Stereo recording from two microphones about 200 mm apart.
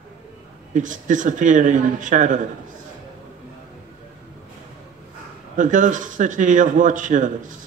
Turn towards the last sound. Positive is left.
turn(degrees=-40)  # may be behind; listen again after turning